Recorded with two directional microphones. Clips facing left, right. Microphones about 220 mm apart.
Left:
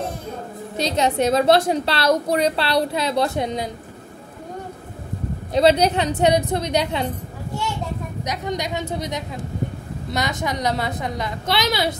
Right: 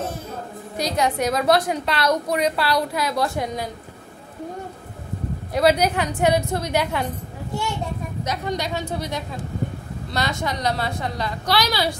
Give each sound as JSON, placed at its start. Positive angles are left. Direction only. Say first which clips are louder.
{"t": 0.7, "sound": "a woman's voice", "louder": "left 2 dB", "side_deg": 25}
{"t": 5.5, "sound": "a woman's voice", "louder": "left 2 dB", "side_deg": 25}
{"t": 8.2, "sound": "a woman's voice", "louder": "even", "side_deg": 15}